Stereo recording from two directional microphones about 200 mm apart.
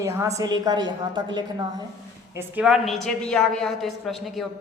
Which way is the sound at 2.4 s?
5° right (ahead or behind).